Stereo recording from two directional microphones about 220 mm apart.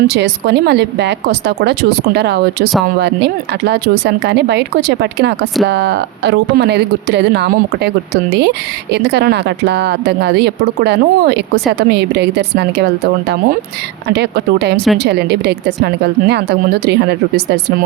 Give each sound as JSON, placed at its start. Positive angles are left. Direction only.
{"t": 0.1, "sound": "speech", "side_deg": -50}